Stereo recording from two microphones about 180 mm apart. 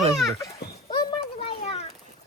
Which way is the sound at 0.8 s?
25° left (ahead or behind).